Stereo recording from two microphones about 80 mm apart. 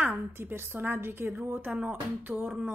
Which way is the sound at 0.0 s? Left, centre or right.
Right.